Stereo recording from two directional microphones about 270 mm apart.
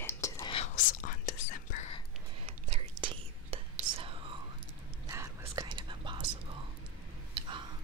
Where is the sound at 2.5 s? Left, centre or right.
Centre.